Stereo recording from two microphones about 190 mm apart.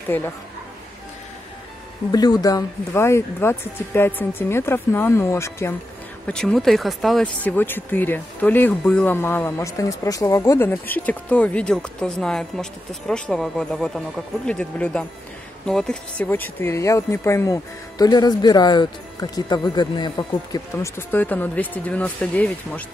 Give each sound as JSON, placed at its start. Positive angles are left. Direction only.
{"t": 0.1, "sound": "speech", "side_deg": 10}
{"t": 2.1, "sound": "speech", "side_deg": 20}
{"t": 6.2, "sound": "speech", "side_deg": 5}